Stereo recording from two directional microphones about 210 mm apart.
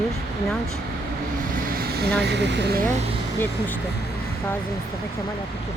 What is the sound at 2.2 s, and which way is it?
Speech, 55° right (ahead or behind).